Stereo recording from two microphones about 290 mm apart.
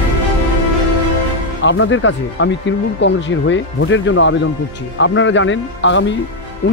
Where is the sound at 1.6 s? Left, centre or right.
Left.